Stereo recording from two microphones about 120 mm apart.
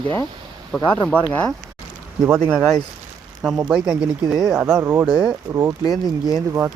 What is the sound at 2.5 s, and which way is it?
Speech, 5° left (ahead or behind).